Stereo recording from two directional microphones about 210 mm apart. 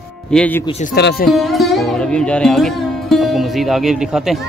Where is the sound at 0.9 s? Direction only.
50° left (ahead or behind).